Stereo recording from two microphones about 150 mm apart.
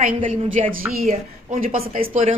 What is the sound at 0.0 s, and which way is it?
A woman's voice, 55° right (ahead or behind).